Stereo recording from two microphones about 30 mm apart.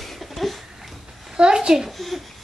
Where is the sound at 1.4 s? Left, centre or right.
Right.